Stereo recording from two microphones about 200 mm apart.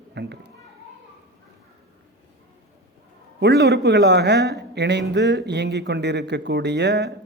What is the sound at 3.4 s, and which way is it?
Speech, 55° right (ahead or behind).